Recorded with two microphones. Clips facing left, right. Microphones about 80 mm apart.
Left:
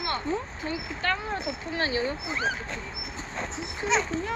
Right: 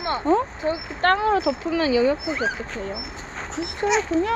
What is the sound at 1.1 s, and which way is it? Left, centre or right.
Speech, right.